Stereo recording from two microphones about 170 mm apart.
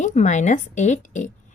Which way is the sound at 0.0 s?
45° left (ahead or behind).